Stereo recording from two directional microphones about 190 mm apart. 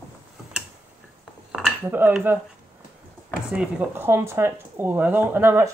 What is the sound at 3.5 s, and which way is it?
Speech, 5° right (ahead or behind).